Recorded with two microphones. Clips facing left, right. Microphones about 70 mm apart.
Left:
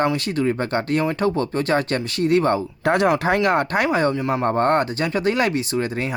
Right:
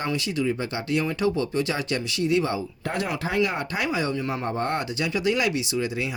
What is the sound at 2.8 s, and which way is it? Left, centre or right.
Speech, left.